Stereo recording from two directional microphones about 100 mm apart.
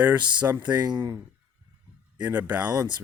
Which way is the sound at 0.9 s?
45° right (ahead or behind).